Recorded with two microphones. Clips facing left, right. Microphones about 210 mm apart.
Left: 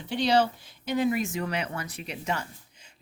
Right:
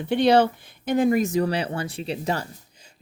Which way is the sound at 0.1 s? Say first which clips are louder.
Right 6 dB; 55° right (ahead or behind).